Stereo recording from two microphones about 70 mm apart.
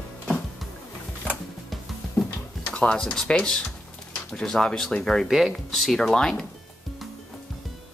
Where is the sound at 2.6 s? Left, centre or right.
Centre.